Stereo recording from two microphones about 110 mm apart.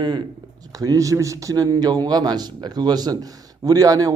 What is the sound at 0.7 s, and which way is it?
A man's voice, 30° right (ahead or behind).